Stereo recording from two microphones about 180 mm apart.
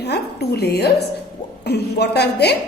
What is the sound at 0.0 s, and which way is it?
A woman's voice, 65° left (ahead or behind).